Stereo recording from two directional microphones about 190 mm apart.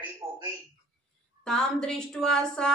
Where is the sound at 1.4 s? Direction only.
5° left (ahead or behind).